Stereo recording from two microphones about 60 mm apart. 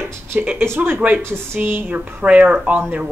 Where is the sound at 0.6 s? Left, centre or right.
Right.